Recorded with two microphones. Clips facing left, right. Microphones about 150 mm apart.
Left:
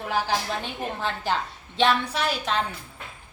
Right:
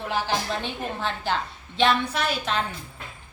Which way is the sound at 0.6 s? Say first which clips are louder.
Even; 5° left (ahead or behind).